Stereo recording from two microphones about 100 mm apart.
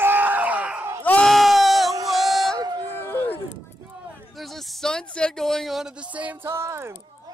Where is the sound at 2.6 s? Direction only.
45° right (ahead or behind).